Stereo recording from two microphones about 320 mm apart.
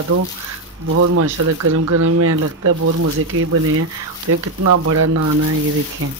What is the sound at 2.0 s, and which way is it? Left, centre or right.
Speech, right.